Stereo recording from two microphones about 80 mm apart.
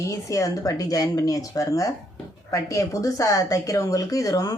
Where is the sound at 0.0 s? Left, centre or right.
Left.